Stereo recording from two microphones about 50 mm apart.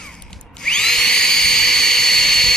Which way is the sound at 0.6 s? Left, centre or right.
Centre.